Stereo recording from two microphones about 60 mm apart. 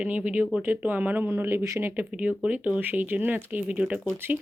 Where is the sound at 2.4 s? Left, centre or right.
Right.